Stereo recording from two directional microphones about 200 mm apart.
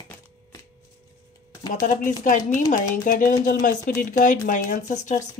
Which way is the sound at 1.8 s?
40° left (ahead or behind).